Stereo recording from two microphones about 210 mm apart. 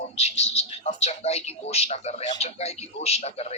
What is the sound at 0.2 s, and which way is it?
Speech, 30° left (ahead or behind).